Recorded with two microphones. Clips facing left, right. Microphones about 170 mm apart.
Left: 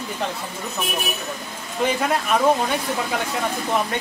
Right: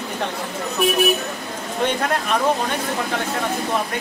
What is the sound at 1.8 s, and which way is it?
Speech, 5° left (ahead or behind).